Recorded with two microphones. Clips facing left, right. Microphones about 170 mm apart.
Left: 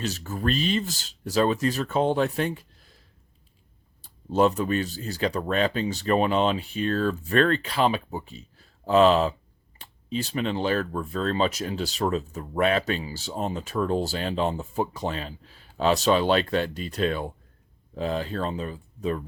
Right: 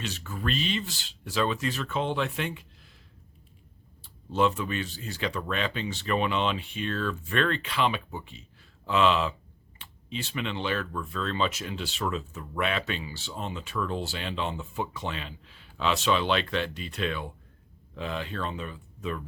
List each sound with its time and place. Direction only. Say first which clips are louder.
0.0 s speech: left 5 dB; 40° left (ahead or behind)
4.0 s speech: left 4 dB; 40° left (ahead or behind)